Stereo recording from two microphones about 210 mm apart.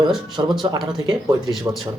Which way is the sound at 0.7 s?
20° right (ahead or behind).